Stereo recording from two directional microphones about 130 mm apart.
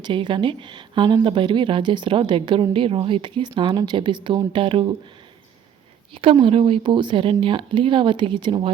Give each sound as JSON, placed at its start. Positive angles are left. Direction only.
{"t": 0.0, "sound": "a woman's voice", "side_deg": -40}
{"t": 6.4, "sound": "a woman's voice", "side_deg": -45}